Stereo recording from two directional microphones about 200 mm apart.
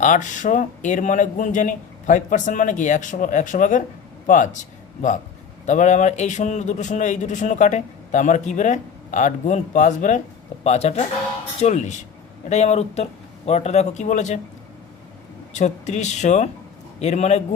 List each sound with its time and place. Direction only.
0.0 s a man's voice: 40° left (ahead or behind)
5.6 s a man's voice: 35° left (ahead or behind)
15.5 s a man's voice: 35° left (ahead or behind)